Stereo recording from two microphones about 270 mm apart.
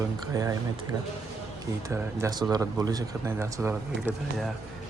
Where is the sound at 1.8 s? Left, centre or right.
Centre.